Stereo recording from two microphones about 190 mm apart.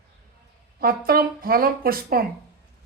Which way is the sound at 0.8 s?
50° right (ahead or behind).